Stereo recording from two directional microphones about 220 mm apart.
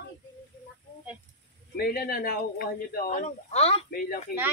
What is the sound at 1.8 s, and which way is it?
Speech, 45° left (ahead or behind).